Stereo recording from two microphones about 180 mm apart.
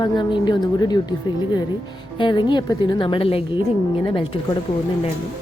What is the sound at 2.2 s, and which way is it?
A woman's voice, 25° left (ahead or behind).